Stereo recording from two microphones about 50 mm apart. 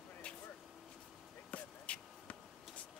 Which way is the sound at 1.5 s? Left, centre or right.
Left.